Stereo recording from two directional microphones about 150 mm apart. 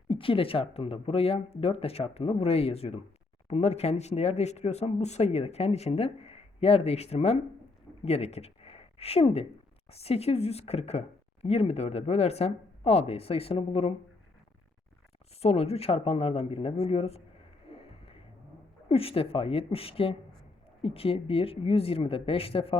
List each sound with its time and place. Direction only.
0.1 s speech: 35° left (ahead or behind)
15.4 s speech: 45° left (ahead or behind)
17.7 s music: 40° left (ahead or behind)
18.9 s speech: 40° left (ahead or behind)